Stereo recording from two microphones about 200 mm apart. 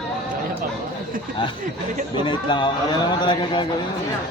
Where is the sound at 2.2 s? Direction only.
25° left (ahead or behind).